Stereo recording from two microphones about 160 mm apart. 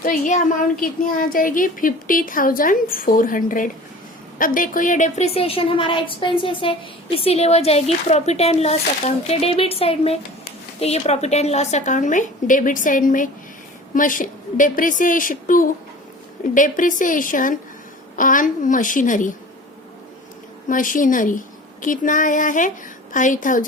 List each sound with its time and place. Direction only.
0.0 s a woman's voice: 55° left (ahead or behind)
20.7 s speech: 55° left (ahead or behind)